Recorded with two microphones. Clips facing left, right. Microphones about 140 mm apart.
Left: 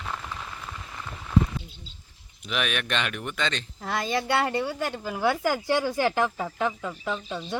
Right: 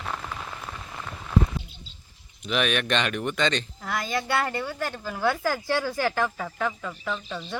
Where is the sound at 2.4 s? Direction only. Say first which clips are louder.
Right 4 dB; 5° left (ahead or behind).